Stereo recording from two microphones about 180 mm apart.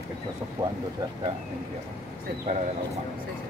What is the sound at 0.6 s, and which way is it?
Speech, 20° right (ahead or behind).